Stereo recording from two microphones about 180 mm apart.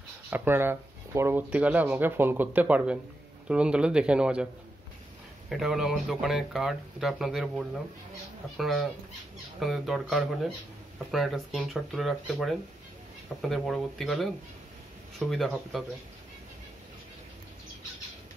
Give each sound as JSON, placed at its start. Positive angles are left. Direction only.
{"t": 0.3, "sound": "speech", "side_deg": -10}
{"t": 5.5, "sound": "speech", "side_deg": 0}